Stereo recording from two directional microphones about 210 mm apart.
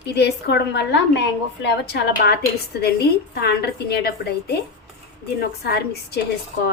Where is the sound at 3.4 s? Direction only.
50° left (ahead or behind).